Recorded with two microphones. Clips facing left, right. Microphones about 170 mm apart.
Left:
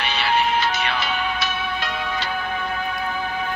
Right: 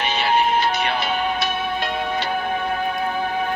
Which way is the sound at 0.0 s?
45° right (ahead or behind).